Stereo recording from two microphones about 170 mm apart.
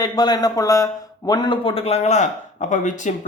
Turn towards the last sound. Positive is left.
turn(degrees=45)  # may be behind; listen again after turning